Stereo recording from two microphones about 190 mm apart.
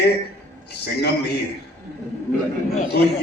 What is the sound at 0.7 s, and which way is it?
Speech, 60° left (ahead or behind).